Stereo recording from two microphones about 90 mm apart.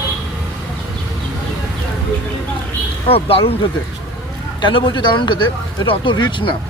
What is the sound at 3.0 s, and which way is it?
Speech, 90° left.